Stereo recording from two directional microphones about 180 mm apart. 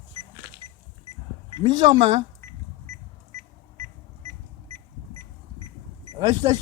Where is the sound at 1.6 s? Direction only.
25° right (ahead or behind).